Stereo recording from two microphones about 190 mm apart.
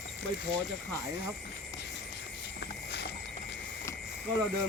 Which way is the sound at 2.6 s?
60° left (ahead or behind).